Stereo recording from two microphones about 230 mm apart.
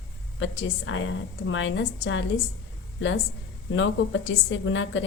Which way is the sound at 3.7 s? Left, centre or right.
Left.